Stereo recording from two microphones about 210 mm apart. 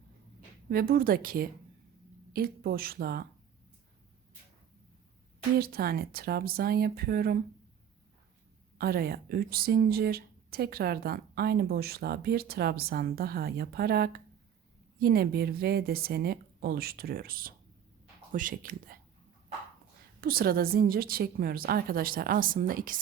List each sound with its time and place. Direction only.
0.7 s speech: 45° right (ahead or behind)
5.5 s speech: 45° right (ahead or behind)
8.8 s speech: 45° right (ahead or behind)
20.2 s speech: 45° right (ahead or behind)